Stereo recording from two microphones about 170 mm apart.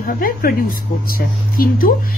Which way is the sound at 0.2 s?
60° left (ahead or behind).